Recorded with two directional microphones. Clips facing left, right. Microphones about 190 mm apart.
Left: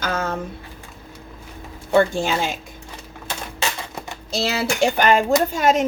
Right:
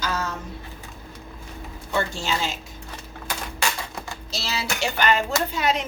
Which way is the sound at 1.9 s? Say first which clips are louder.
Left 8 dB; 55° left (ahead or behind).